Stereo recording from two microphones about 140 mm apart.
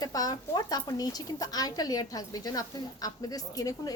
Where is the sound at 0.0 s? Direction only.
25° left (ahead or behind).